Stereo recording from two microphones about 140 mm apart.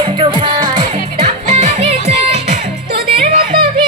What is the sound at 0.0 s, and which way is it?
Music, 40° right (ahead or behind).